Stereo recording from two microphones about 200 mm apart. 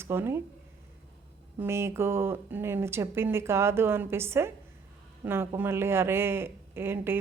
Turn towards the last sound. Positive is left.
turn(degrees=-10)  # may be behind; listen again after turning